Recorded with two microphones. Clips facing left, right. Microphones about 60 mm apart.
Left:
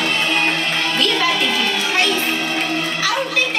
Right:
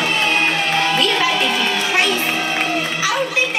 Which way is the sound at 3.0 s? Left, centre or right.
Centre.